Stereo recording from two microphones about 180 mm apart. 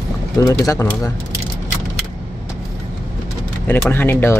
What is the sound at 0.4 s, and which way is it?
Speech, 15° left (ahead or behind).